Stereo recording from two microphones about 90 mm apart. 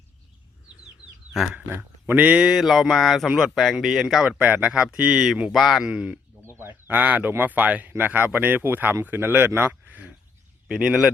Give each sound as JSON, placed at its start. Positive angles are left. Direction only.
{"t": 1.5, "sound": "a man's voice", "side_deg": -20}
{"t": 6.4, "sound": "speech", "side_deg": -25}